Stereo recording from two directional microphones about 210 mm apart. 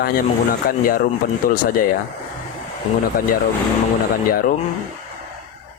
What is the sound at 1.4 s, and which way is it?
Speech, 40° left (ahead or behind).